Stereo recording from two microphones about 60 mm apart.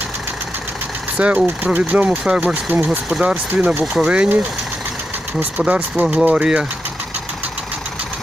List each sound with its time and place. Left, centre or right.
1.1 s speech: centre
2.6 s speech: right
3.1 s speech: centre
3.5 s speech: right
5.4 s speech: right